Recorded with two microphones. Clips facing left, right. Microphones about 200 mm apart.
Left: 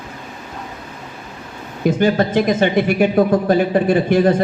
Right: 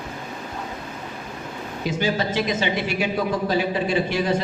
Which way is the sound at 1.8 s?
55° left (ahead or behind).